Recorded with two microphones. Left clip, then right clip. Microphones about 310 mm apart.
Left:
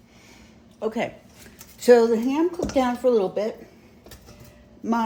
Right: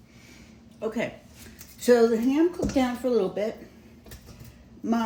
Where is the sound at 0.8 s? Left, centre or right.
Left.